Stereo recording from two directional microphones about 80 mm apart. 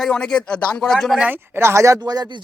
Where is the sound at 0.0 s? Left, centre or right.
Centre.